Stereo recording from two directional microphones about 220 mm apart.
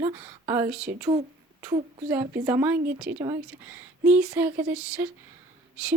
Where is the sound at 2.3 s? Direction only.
10° right (ahead or behind).